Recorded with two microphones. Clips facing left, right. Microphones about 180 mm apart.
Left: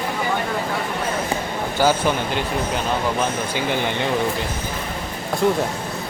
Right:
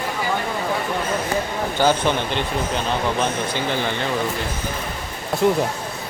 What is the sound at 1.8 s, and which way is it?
Speech, 10° left (ahead or behind).